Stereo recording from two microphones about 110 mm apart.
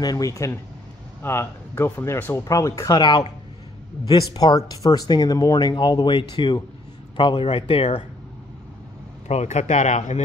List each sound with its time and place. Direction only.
0.0 s speech: 35° left (ahead or behind); by 8.0 s 55° left (ahead or behind)
9.3 s speech: 85° left